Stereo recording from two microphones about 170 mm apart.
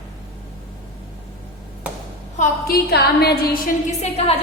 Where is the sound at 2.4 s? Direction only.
65° left (ahead or behind).